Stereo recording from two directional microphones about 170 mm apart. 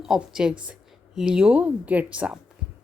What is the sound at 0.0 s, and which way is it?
A woman's voice, 5° right (ahead or behind).